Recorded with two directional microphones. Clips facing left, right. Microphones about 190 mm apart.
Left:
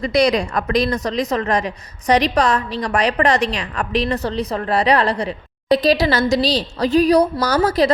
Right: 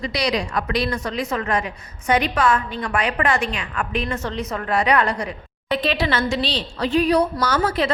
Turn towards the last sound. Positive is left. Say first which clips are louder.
# left 5 dB
turn(degrees=40)  # may be behind; listen again after turning